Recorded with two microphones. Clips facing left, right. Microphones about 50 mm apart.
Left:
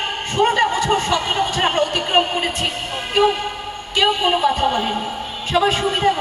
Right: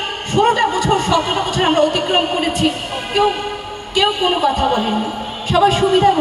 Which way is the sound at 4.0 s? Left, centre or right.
Left.